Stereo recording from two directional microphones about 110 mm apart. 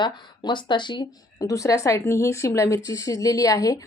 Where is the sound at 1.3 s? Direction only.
30° left (ahead or behind).